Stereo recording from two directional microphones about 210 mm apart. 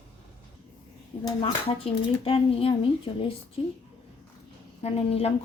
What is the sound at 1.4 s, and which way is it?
Speech, 25° left (ahead or behind).